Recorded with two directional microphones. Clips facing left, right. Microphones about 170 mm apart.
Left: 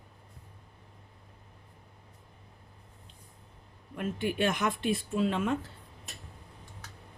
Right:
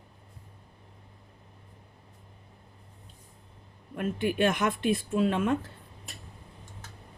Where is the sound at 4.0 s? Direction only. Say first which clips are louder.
Right 3 dB; 55° right (ahead or behind).